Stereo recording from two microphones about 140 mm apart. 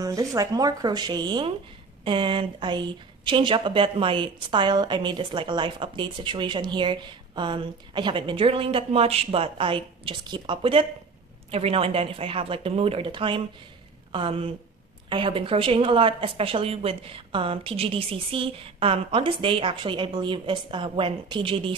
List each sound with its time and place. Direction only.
0.0 s a woman's voice: 25° right (ahead or behind)